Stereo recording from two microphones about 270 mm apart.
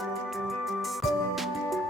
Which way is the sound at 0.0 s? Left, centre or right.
Centre.